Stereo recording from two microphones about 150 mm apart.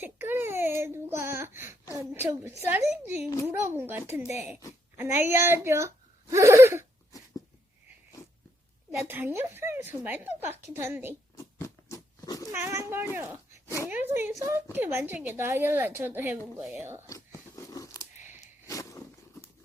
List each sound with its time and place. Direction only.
0.0 s a woman's voice: 15° right (ahead or behind)
8.9 s a woman's voice: 15° right (ahead or behind)
11.3 s pig: 20° left (ahead or behind)
12.5 s a woman's voice: 15° right (ahead or behind)
17.7 s a sound: 20° left (ahead or behind)